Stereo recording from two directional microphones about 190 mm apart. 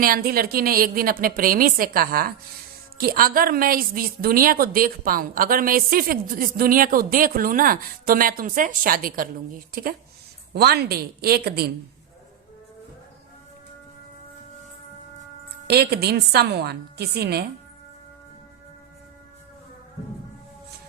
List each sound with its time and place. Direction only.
0.0 s a woman's voice: 50° right (ahead or behind)
15.6 s a woman's voice: 55° right (ahead or behind)